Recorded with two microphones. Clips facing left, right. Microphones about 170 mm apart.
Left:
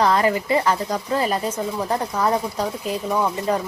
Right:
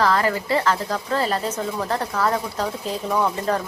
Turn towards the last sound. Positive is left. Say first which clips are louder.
# even
turn(degrees=10)  # may be behind; listen again after turning